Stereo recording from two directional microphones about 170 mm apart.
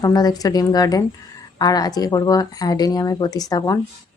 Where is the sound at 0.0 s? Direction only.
25° left (ahead or behind).